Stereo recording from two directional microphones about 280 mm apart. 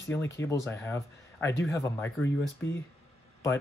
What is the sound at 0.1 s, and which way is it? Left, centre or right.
A man's voice, centre.